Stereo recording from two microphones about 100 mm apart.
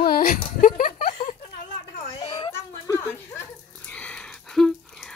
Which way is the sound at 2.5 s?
30° left (ahead or behind).